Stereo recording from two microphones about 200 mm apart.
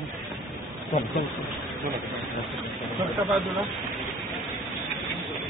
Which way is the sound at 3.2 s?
Centre (ahead or behind).